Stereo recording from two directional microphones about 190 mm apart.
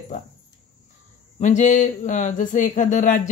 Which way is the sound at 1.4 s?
40° left (ahead or behind).